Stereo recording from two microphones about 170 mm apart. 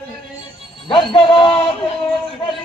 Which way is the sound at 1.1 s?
30° left (ahead or behind).